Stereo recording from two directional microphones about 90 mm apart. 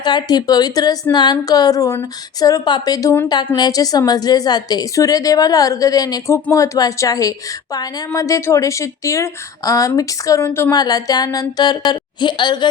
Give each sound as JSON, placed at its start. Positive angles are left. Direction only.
{"t": 0.0, "sound": "a woman's voice", "side_deg": 55}
{"t": 10.7, "sound": "a woman's voice", "side_deg": 45}